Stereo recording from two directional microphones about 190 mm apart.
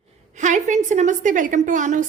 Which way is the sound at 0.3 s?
40° right (ahead or behind).